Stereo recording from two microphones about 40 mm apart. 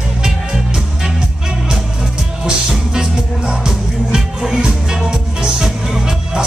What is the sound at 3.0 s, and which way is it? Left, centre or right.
Music, centre.